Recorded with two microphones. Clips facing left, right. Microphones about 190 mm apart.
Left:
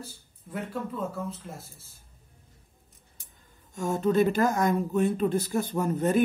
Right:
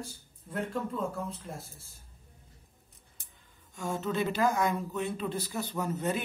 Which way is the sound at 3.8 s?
45° left (ahead or behind).